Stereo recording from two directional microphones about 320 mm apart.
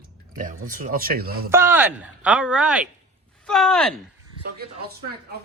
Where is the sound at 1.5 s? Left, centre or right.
Centre.